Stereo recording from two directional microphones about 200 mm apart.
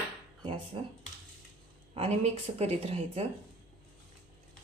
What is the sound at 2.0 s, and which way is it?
A woman's voice, 30° right (ahead or behind).